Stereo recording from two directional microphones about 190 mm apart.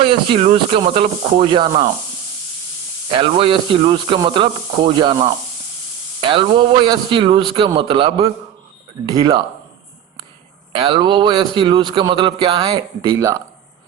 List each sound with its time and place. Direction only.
0.0 s a man's voice: 30° right (ahead or behind)
3.1 s a man's voice: 30° right (ahead or behind)
10.7 s a man's voice: 25° right (ahead or behind)